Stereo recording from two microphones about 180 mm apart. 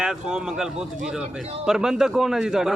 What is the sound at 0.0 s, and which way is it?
Speech, 5° right (ahead or behind).